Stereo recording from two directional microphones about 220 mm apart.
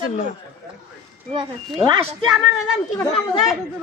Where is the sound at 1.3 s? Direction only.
25° right (ahead or behind).